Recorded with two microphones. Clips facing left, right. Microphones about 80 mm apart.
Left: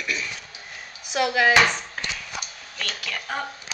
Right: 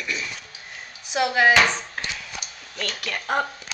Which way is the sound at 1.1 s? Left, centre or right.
Right.